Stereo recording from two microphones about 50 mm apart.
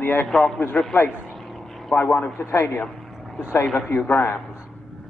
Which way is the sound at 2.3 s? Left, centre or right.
Left.